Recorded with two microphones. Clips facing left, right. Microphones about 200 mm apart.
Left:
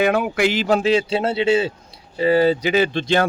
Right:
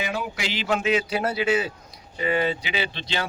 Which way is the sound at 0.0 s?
60° left (ahead or behind).